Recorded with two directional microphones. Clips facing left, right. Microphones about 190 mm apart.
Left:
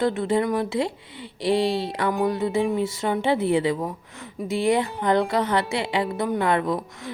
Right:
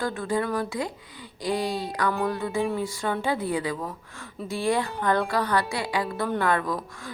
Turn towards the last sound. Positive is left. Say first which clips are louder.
# left 3 dB
turn(degrees=20)  # may be behind; listen again after turning